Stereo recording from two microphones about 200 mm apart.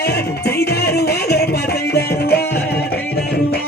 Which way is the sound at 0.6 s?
55° left (ahead or behind).